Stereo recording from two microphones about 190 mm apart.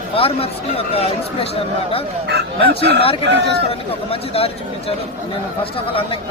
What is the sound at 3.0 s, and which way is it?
Speech, 30° left (ahead or behind).